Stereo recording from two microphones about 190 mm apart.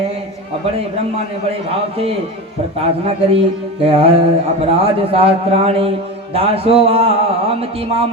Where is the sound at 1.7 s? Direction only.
30° right (ahead or behind).